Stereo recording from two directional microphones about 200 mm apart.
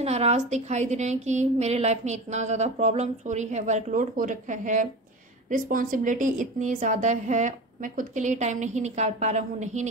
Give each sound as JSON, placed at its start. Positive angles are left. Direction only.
{"t": 0.0, "sound": "a woman's voice", "side_deg": -30}